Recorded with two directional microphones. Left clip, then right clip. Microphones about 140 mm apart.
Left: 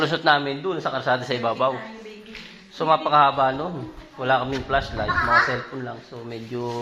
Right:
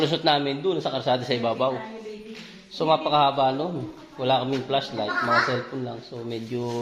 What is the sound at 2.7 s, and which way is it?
Speech, centre (ahead or behind).